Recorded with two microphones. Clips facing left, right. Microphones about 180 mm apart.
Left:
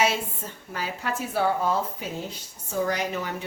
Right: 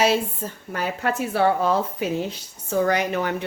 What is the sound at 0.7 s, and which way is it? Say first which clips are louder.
A woman's voice: right 5 dB; 60° right (ahead or behind).